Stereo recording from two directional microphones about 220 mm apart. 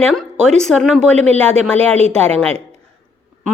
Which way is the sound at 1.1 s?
30° right (ahead or behind).